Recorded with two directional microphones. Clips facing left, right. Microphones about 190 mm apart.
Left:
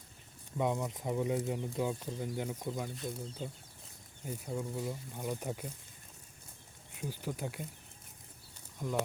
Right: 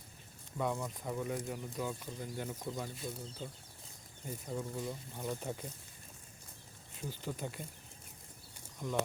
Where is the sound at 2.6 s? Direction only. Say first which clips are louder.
Left 3 dB; 10° left (ahead or behind).